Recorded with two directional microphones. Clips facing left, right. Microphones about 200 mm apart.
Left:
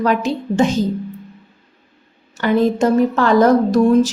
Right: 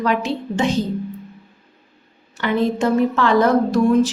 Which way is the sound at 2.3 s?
40° left (ahead or behind).